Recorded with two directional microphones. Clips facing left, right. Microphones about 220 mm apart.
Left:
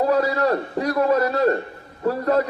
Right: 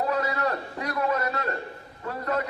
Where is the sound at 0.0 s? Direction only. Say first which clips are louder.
Left 7 dB; 35° left (ahead or behind).